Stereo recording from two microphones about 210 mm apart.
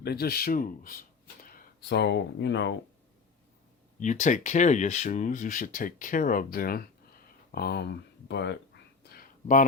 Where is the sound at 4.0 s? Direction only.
35° left (ahead or behind); by 8.6 s 55° left (ahead or behind).